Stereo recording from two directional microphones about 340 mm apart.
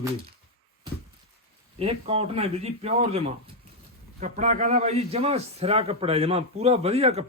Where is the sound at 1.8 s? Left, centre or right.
Centre.